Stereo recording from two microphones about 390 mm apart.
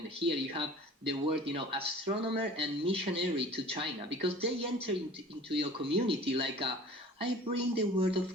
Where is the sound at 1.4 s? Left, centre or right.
Centre.